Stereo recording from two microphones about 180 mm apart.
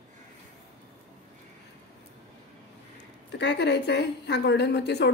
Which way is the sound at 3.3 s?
70° left (ahead or behind).